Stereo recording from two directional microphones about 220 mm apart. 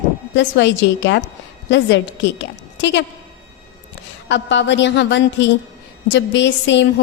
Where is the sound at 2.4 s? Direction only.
55° left (ahead or behind).